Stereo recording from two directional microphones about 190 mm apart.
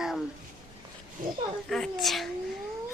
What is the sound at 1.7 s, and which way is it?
Speech, centre (ahead or behind).